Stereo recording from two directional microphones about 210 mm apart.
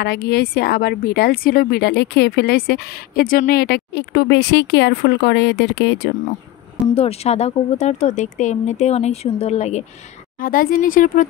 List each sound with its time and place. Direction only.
0.0 s a woman's voice: 50° left (ahead or behind)
7.0 s speech: 30° left (ahead or behind)
10.4 s speech: 40° left (ahead or behind)